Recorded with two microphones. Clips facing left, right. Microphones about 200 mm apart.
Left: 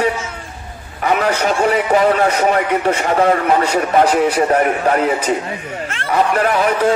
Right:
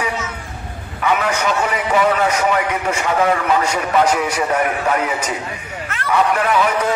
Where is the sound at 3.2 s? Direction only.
35° left (ahead or behind).